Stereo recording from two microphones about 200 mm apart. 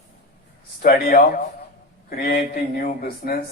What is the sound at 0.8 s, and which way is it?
A man's voice, 45° left (ahead or behind).